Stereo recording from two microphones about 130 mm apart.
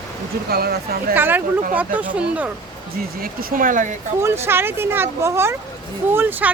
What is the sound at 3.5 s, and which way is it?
Speech, 90° right.